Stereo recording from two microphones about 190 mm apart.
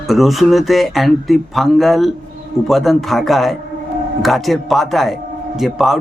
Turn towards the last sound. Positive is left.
turn(degrees=0)  # may be behind; listen again after turning